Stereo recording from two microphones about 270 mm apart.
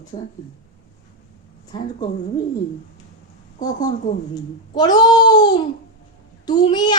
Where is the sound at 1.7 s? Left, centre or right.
Centre.